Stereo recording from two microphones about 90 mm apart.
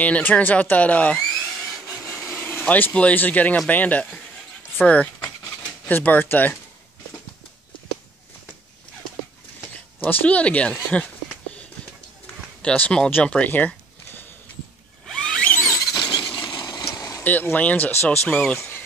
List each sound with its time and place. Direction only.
0.0 s speech: 20° left (ahead or behind)
2.2 s speech: 25° left (ahead or behind)
9.9 s speech: 20° left (ahead or behind)
12.6 s speech: 15° left (ahead or behind)
15.0 s a sound: 10° left (ahead or behind)
15.9 s a sound: 55° left (ahead or behind)
16.9 s vehicle: 40° left (ahead or behind)
17.2 s speech: 20° left (ahead or behind)